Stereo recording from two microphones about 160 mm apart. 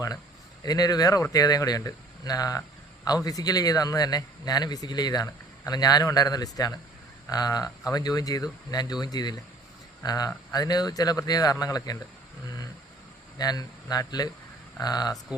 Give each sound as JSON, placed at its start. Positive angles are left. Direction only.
{"t": 0.6, "sound": "speech", "side_deg": 25}
{"t": 13.4, "sound": "speech", "side_deg": 25}